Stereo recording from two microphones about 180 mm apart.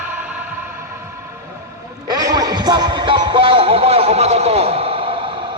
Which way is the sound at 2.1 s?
20° right (ahead or behind).